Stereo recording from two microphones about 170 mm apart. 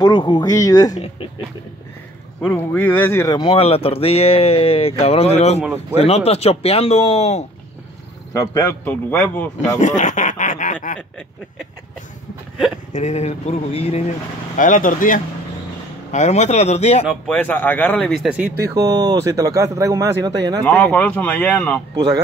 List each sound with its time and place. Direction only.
0.0 s speech: 25° left (ahead or behind)
2.4 s speech: 10° left (ahead or behind); by 7.4 s 40° left (ahead or behind)
8.3 s speech: 20° left (ahead or behind)
9.6 s speech: 45° left (ahead or behind)
12.9 s speech: 40° left (ahead or behind)
14.6 s speech: 50° left (ahead or behind)
17.1 s speech: 5° left (ahead or behind)
18.8 s speech: 25° right (ahead or behind)
20.6 s speech: 10° left (ahead or behind)